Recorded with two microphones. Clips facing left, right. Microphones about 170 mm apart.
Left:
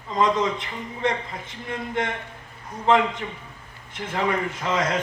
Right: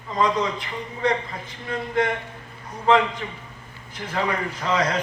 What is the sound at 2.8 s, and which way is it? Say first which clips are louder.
A man's voice: right 1 dB; 25° left (ahead or behind).